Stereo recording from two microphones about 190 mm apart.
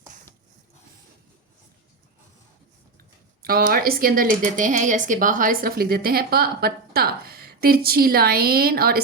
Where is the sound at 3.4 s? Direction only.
50° right (ahead or behind).